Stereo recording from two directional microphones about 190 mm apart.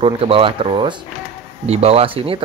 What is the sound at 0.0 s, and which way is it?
A man's voice, 30° right (ahead or behind).